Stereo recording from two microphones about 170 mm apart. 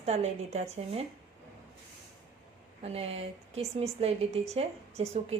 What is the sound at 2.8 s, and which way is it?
A woman's voice, 35° right (ahead or behind).